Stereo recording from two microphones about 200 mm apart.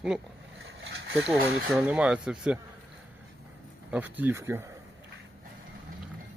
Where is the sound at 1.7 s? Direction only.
5° right (ahead or behind).